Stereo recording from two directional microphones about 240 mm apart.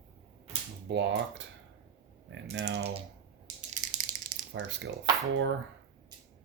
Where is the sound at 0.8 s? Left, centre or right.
Right.